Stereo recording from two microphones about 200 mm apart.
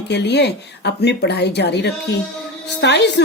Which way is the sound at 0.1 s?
60° left (ahead or behind).